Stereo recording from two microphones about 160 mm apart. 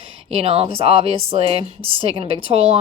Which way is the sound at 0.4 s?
35° right (ahead or behind).